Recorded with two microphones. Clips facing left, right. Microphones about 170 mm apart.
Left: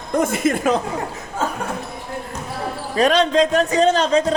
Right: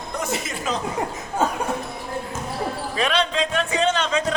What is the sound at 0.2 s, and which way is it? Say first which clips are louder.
Speech: left 10 dB; 50° left (ahead or behind).